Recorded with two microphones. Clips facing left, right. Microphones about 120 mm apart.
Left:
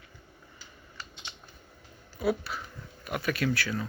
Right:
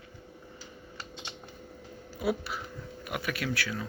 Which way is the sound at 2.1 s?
15° right (ahead or behind).